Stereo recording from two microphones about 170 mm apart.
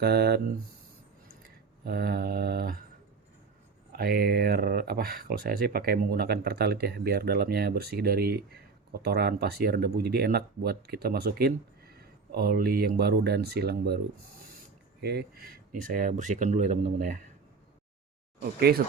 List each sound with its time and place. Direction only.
0.0 s speech: 70° right (ahead or behind)
1.8 s mantra: 65° right (ahead or behind)
3.9 s speech: 65° right (ahead or behind)
15.0 s speech: 70° right (ahead or behind)
15.7 s speech: 50° right (ahead or behind)
18.3 s speech: 65° right (ahead or behind)